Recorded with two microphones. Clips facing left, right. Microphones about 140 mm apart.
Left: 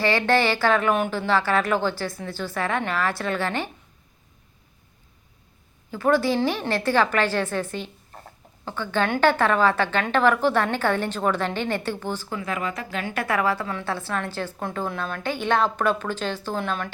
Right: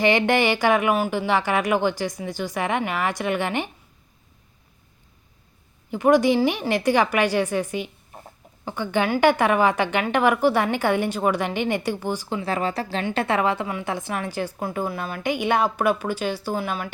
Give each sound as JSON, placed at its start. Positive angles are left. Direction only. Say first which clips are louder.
{"t": 0.0, "sound": "a woman's voice", "louder": "right 2 dB", "side_deg": -20}
{"t": 5.9, "sound": "a woman's voice", "louder": "right 4 dB", "side_deg": -15}
{"t": 12.4, "sound": "a woman's voice", "louder": "right 4 dB", "side_deg": -30}